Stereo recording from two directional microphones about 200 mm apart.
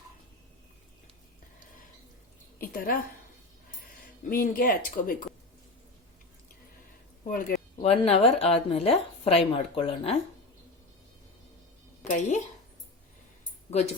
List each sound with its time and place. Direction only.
2.6 s speech: 45° left (ahead or behind)
4.3 s speech: 45° left (ahead or behind)
7.3 s speech: 45° left (ahead or behind)
12.0 s speech: 35° left (ahead or behind)
13.7 s speech: 35° left (ahead or behind)